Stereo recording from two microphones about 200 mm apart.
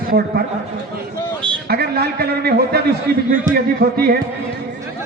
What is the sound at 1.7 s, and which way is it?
A man's voice, 50° right (ahead or behind).